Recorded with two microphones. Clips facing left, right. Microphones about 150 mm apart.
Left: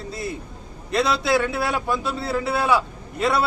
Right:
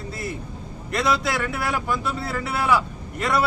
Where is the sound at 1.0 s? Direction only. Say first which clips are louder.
Left 3 dB; 25° left (ahead or behind).